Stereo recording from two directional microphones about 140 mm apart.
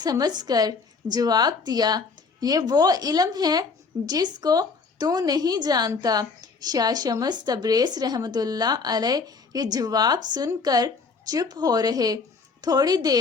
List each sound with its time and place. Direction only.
0.0 s speech: 30° right (ahead or behind)